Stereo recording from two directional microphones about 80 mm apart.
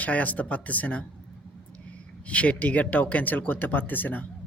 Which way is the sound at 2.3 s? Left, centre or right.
Centre.